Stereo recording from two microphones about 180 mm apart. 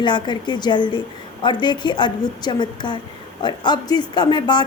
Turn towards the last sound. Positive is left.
turn(degrees=25)  # may be behind; listen again after turning